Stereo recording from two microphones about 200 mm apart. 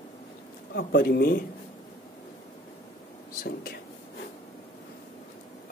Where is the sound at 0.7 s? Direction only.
50° left (ahead or behind).